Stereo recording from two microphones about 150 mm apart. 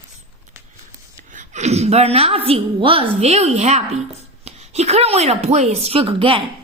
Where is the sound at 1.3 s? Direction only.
50° right (ahead or behind).